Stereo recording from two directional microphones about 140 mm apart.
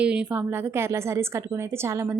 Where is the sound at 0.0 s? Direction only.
10° right (ahead or behind).